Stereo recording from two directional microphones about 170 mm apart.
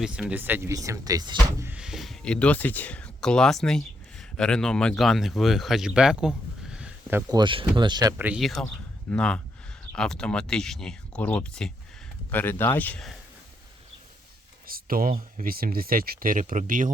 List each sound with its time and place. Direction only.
0.0 s speech: 5° right (ahead or behind)
1.7 s speech: 5° right (ahead or behind)
7.3 s speech: 25° right (ahead or behind)
8.2 s speech: 5° right (ahead or behind)
14.7 s speech: 60° right (ahead or behind)